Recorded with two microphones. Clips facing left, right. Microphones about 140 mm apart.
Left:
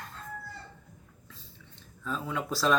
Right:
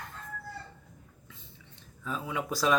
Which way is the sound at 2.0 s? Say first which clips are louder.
Left 1 dB; 10° right (ahead or behind).